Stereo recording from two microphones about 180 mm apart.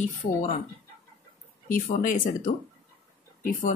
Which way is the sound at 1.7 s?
45° left (ahead or behind).